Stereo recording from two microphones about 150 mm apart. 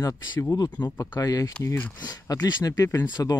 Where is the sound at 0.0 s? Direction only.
25° left (ahead or behind).